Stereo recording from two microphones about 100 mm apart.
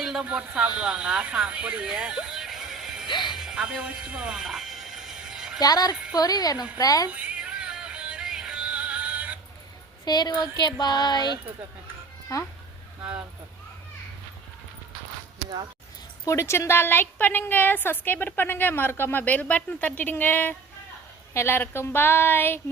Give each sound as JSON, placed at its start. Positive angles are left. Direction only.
{"t": 0.0, "sound": "speech", "side_deg": -10}
{"t": 3.1, "sound": "music", "side_deg": 50}
{"t": 3.3, "sound": "a sound", "side_deg": -5}
{"t": 5.5, "sound": "speech", "side_deg": 40}
{"t": 7.1, "sound": "music", "side_deg": -15}
{"t": 10.1, "sound": "music", "side_deg": 45}
{"t": 12.3, "sound": "speech", "side_deg": 35}
{"t": 16.2, "sound": "a woman's voice", "side_deg": 30}